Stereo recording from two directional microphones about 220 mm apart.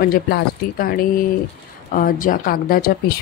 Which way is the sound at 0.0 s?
40° left (ahead or behind).